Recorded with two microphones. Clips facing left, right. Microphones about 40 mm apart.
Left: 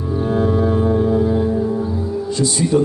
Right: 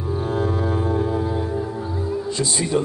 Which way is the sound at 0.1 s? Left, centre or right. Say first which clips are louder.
Left 5 dB; centre.